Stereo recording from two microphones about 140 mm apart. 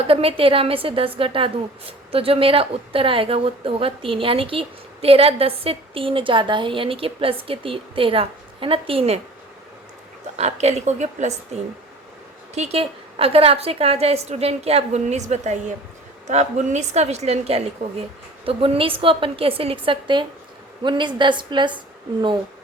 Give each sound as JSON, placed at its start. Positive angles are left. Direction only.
{"t": 0.0, "sound": "a woman's voice", "side_deg": -45}
{"t": 10.3, "sound": "a woman's voice", "side_deg": -50}